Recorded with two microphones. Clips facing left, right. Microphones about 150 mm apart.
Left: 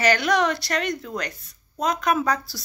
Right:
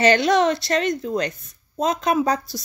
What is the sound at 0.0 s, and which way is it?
A woman's voice, 25° right (ahead or behind).